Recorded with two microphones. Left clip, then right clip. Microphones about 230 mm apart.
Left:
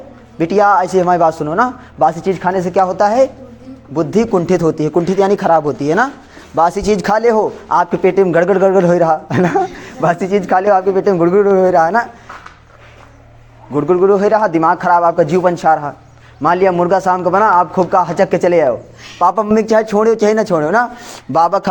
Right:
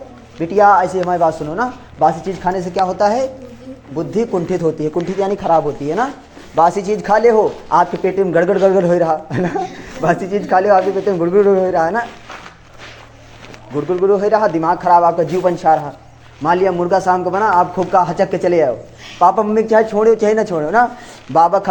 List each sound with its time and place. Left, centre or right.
0.3 s speech: left
13.7 s speech: left